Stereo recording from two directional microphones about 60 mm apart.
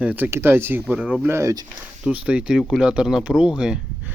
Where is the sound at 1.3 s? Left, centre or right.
Right.